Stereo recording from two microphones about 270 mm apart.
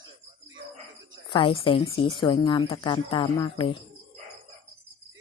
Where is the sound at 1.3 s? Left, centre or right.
Centre.